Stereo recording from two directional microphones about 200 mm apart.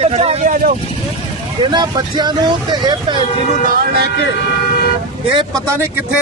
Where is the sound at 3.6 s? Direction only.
50° right (ahead or behind).